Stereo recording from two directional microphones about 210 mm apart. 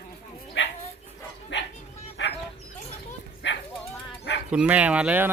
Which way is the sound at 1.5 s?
60° left (ahead or behind).